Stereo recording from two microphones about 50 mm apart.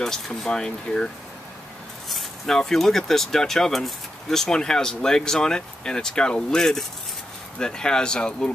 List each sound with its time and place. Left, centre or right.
0.0 s speech: centre